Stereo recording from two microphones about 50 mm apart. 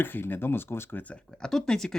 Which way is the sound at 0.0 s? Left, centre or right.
Left.